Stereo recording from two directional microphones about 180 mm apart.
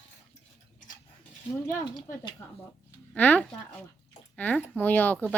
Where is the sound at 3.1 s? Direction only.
10° left (ahead or behind).